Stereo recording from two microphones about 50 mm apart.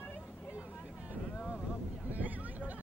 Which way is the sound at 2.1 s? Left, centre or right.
Right.